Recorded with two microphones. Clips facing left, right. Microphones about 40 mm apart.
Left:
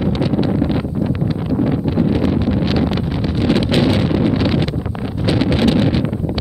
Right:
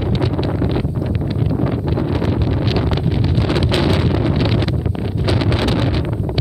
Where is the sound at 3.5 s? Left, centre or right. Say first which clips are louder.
Left 3 dB; centre.